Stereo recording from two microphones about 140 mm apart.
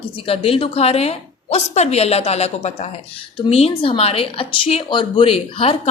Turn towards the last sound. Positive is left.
turn(degrees=40)  # may be behind; listen again after turning